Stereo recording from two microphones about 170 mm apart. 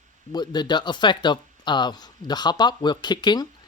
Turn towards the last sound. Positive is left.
turn(degrees=25)  # may be behind; listen again after turning